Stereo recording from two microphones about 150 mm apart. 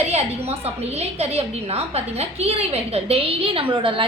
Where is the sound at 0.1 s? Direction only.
45° right (ahead or behind).